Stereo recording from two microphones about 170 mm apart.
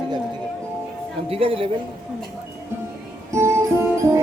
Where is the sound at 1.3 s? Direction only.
30° right (ahead or behind).